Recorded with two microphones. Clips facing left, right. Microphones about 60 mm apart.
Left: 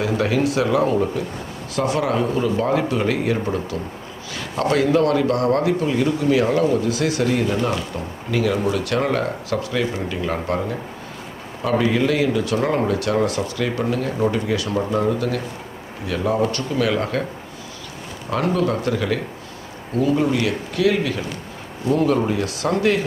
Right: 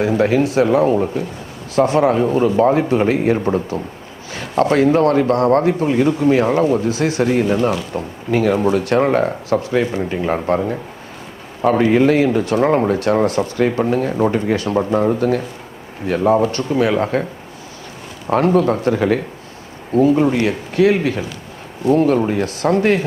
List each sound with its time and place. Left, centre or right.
0.0 s speech: right
18.3 s speech: right